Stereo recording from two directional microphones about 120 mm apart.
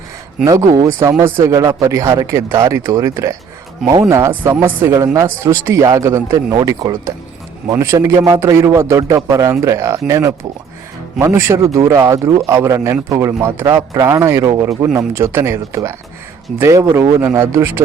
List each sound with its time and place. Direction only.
0.4 s speech: 30° right (ahead or behind)
4.5 s speech: 15° right (ahead or behind)
5.1 s speech: 25° right (ahead or behind)